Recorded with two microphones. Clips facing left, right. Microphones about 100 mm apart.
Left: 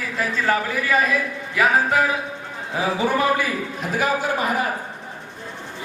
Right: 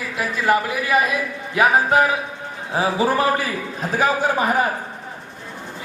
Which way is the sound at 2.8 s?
35° right (ahead or behind).